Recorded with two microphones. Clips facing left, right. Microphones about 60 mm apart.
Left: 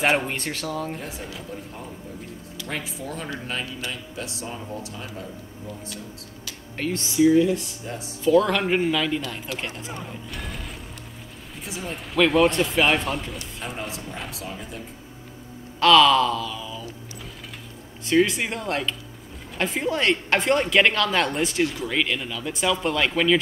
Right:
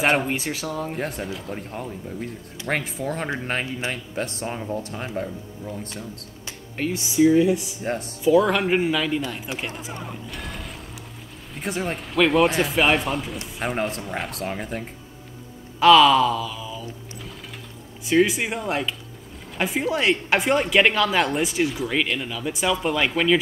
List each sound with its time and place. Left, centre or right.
0.0 s speech: centre
0.9 s speech: right
6.8 s speech: centre
7.8 s speech: right
8.2 s speech: centre
9.5 s speech: right
10.3 s mechanisms: centre
11.6 s speech: right
12.0 s speech: centre
13.6 s speech: right
15.8 s a sound: centre
18.0 s speech: centre